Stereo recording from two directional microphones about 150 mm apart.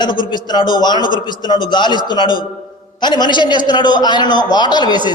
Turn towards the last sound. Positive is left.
turn(degrees=30)  # may be behind; listen again after turning